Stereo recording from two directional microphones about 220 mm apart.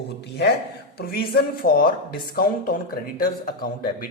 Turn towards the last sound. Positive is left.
turn(degrees=40)  # may be behind; listen again after turning